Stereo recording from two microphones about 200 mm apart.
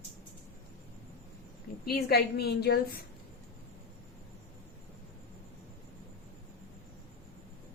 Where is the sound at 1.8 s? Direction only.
50° left (ahead or behind).